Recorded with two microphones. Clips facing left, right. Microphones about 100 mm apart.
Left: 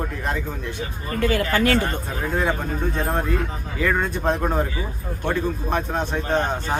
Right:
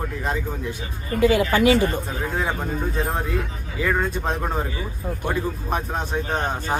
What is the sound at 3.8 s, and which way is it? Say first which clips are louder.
A man's voice: left 1 dB; centre (ahead or behind).